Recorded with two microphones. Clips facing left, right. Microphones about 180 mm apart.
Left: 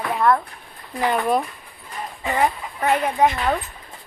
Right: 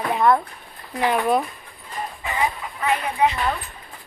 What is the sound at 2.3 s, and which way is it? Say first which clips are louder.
Speech: left 4 dB; 50° left (ahead or behind).